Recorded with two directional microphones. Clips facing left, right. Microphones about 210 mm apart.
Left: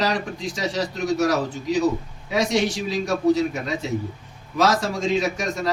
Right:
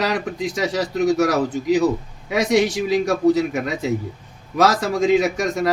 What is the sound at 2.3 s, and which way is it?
A man's voice, 60° right (ahead or behind).